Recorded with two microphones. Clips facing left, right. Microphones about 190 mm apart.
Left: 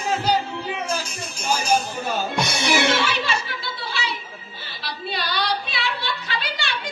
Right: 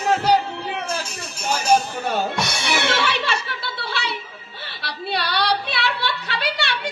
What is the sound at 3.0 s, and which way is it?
Music, 65° right (ahead or behind).